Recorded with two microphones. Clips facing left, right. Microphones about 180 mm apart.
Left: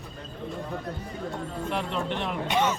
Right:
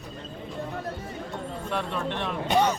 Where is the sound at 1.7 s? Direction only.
15° left (ahead or behind).